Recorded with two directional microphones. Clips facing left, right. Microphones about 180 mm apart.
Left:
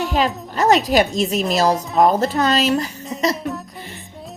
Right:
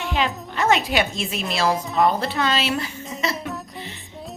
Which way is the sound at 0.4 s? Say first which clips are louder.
Left 5 dB; 40° left (ahead or behind).